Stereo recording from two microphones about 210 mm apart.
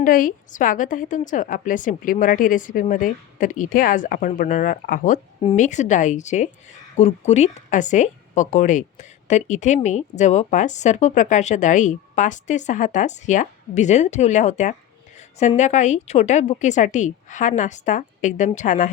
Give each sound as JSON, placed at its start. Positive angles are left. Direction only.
{"t": 0.0, "sound": "a woman's voice", "side_deg": 40}